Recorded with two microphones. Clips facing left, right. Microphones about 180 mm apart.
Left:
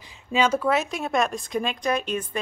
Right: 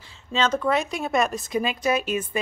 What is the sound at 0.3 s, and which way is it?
Speech, 10° left (ahead or behind).